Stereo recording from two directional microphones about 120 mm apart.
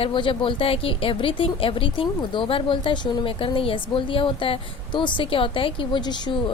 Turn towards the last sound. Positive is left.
turn(degrees=40)  # may be behind; listen again after turning